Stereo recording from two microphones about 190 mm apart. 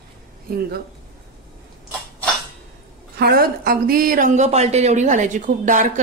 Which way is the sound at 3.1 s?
55° right (ahead or behind).